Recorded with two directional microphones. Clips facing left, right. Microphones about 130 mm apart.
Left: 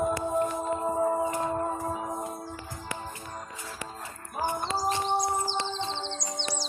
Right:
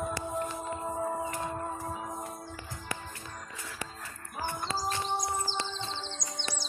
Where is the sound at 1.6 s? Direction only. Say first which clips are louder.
Left 6 dB; 45° left (ahead or behind).